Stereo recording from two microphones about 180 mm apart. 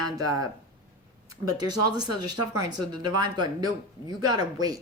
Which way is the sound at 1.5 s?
20° right (ahead or behind).